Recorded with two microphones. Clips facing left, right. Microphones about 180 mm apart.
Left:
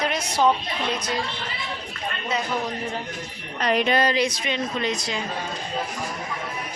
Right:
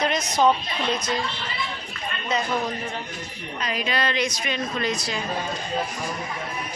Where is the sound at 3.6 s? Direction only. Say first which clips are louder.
Left 6 dB; 65° left (ahead or behind).